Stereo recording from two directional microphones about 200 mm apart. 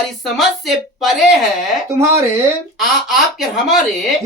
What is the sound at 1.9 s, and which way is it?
Speech, 15° right (ahead or behind).